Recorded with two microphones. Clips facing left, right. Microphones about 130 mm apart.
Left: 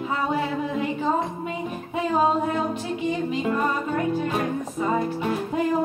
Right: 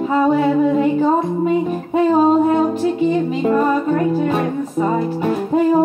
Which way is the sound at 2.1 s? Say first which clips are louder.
Right 8 dB; 40° right (ahead or behind).